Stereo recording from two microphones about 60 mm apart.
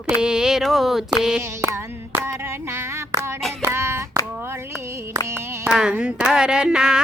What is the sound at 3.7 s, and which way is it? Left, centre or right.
Hands, right.